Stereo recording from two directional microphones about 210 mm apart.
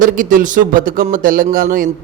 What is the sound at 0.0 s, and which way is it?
Speech, 40° right (ahead or behind).